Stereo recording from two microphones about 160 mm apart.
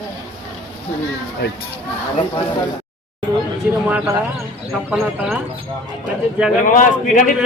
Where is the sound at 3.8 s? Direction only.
15° right (ahead or behind).